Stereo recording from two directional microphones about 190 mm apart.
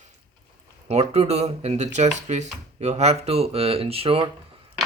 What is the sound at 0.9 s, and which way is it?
Speech, 35° right (ahead or behind).